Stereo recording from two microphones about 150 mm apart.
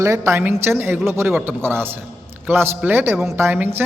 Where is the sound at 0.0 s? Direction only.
20° right (ahead or behind).